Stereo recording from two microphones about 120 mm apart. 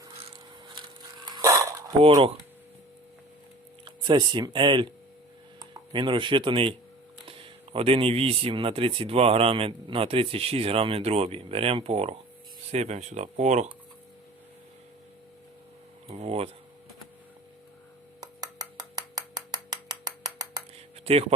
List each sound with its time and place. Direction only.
1.2 s dog: 40° right (ahead or behind)
1.5 s dishes: 25° right (ahead or behind)
3.8 s speech: 40° right (ahead or behind)
5.9 s speech: 45° right (ahead or behind)
12.7 s speech: 70° right (ahead or behind)
16.0 s speech: 60° right (ahead or behind)
18.3 s a sound: 35° right (ahead or behind)
21.0 s speech: 55° right (ahead or behind)